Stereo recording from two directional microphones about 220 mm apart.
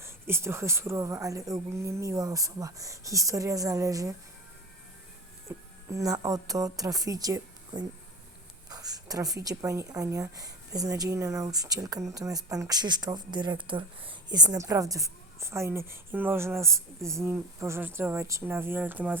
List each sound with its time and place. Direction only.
0.0 s speech: 10° right (ahead or behind)
5.5 s a woman's voice: 15° right (ahead or behind)